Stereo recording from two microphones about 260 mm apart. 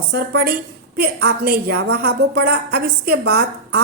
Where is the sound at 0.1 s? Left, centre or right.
Right.